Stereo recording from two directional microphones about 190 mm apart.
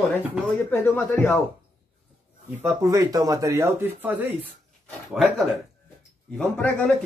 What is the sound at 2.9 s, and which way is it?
Speech, 20° right (ahead or behind).